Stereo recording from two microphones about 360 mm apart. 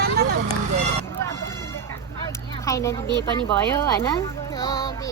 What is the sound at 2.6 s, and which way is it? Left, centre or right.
Speech, centre.